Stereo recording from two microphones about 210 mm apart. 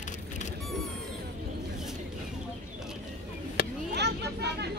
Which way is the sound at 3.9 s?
55° right (ahead or behind).